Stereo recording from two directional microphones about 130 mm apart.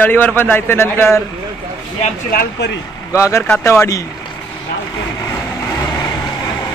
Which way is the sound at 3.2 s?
20° left (ahead or behind).